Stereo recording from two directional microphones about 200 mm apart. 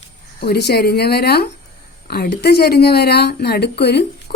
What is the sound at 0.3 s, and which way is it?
Speech, 55° left (ahead or behind).